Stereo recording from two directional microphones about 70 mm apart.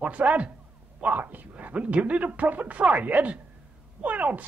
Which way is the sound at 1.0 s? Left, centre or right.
Right.